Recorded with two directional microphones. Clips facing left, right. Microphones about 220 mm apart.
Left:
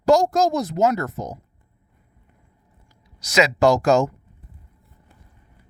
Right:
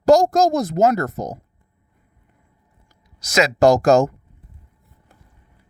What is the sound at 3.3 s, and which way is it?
Speech, 45° right (ahead or behind).